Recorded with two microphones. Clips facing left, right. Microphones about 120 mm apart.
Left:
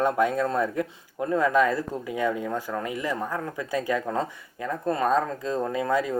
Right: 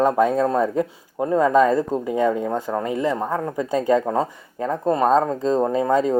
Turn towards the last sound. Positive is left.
turn(degrees=-30)  # may be behind; listen again after turning